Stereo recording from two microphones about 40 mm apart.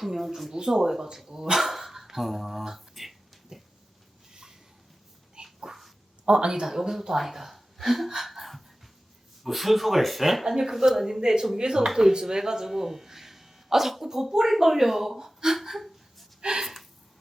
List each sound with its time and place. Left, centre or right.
0.0 s speech: centre
1.5 s dog: centre
4.3 s a sound: centre
5.3 s dog: centre
6.2 s speech: right; by 16.2 s centre
16.4 s a sound: centre